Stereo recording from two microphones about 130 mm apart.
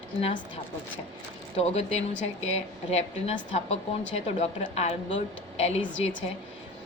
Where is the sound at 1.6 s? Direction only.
55° left (ahead or behind).